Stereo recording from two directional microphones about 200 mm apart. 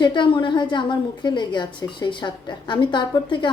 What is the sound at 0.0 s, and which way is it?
A woman's voice, 25° left (ahead or behind).